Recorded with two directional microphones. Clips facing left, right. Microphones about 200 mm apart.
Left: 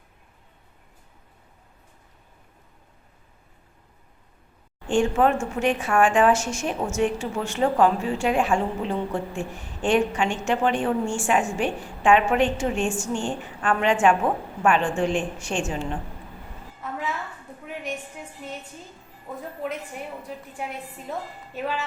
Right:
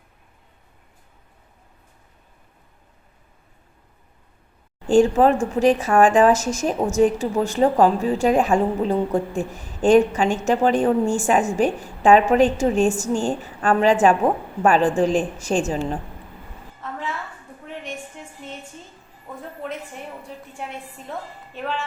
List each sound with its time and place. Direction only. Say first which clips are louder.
4.9 s speech: right 5 dB; 35° right (ahead or behind)
18.2 s music: even; 5° left (ahead or behind)
21.1 s a woman's voice: even; 5° left (ahead or behind)